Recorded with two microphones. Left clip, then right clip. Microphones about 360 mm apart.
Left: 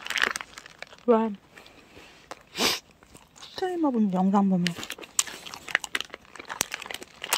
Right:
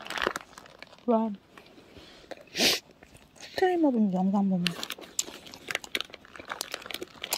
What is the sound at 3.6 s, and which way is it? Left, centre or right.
Speech, left.